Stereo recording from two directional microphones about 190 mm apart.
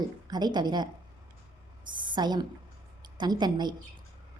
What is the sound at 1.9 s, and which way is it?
A woman's voice, 25° right (ahead or behind).